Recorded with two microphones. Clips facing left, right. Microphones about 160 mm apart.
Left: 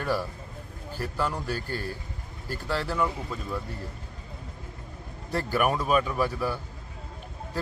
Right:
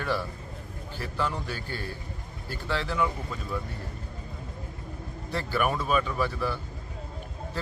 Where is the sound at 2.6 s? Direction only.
10° left (ahead or behind).